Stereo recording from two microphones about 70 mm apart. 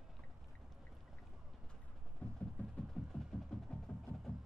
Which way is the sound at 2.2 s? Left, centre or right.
Centre.